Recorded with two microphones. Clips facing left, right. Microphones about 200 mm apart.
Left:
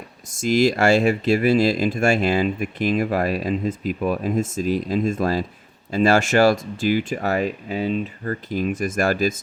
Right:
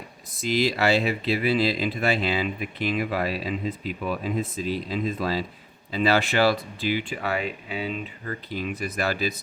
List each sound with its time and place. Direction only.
0.4 s speech: 45° left (ahead or behind)